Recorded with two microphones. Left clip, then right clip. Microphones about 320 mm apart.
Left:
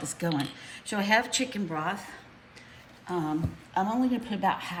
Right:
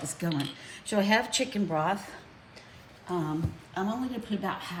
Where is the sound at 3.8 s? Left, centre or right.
Centre.